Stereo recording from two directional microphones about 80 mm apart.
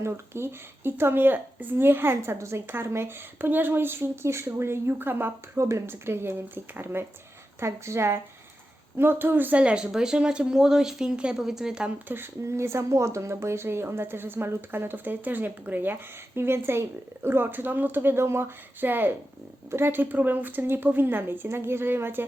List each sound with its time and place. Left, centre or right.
0.0 s speech: right
5.5 s a woman's voice: right; by 11.9 s centre
12.0 s speech: right